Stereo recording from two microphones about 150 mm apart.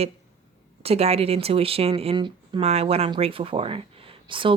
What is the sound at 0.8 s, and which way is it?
Speech, 40° right (ahead or behind).